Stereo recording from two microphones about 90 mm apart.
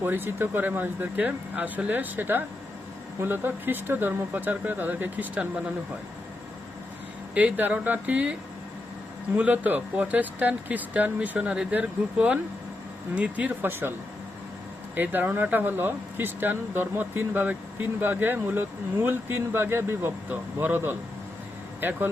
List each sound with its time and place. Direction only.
0.0 s speech: 25° right (ahead or behind)
7.3 s speech: 15° right (ahead or behind)
14.9 s speech: 20° right (ahead or behind)